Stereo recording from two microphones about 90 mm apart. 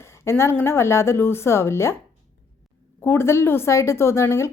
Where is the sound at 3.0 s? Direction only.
25° left (ahead or behind).